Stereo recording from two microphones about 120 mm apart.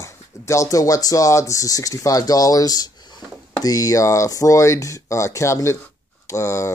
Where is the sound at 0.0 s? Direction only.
25° left (ahead or behind).